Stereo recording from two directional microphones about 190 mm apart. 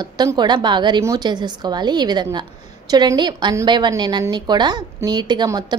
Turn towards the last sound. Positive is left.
turn(degrees=-20)  # may be behind; listen again after turning